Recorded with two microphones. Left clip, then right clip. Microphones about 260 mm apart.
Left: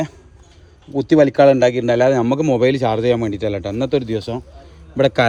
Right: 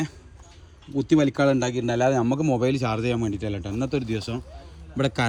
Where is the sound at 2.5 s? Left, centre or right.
Left.